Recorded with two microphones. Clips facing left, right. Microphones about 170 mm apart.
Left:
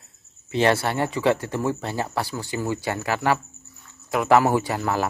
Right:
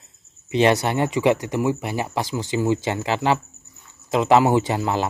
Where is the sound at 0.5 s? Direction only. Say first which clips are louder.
Right 3 dB; 20° right (ahead or behind).